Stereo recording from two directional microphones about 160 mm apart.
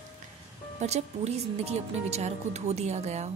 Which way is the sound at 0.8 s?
45° right (ahead or behind).